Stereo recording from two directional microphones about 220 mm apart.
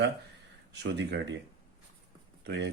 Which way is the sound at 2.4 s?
50° right (ahead or behind).